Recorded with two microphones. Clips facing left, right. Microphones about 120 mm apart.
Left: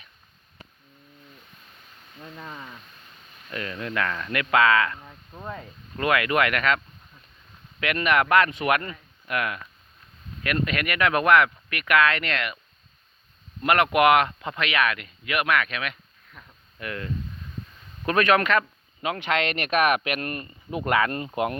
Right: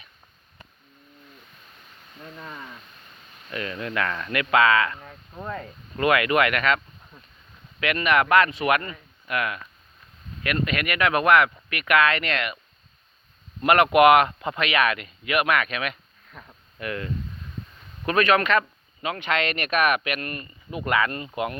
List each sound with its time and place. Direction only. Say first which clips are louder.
3.7 s speech: even; 10° right (ahead or behind)
6.0 s speech: right 2 dB; 15° right (ahead or behind); by 9.6 s centre (ahead or behind)
10.4 s speech: even; 10° right (ahead or behind)
13.6 s speech: right 3 dB; 20° right (ahead or behind); by 18.6 s centre (ahead or behind)
19.0 s speech: even; 10° left (ahead or behind)
20.7 s speech: left 2 dB; 25° left (ahead or behind)
21.0 s speech: left 1 dB; 50° left (ahead or behind)
21.2 s speech: left 2 dB; 25° left (ahead or behind)